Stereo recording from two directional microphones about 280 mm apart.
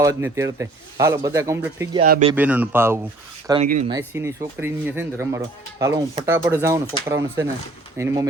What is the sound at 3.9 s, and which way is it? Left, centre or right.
A man's voice, centre.